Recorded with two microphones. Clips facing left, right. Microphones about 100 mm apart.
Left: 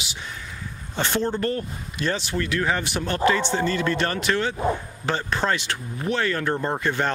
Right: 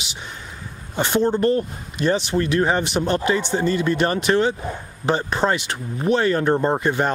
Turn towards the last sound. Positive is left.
turn(degrees=-15)  # may be behind; listen again after turning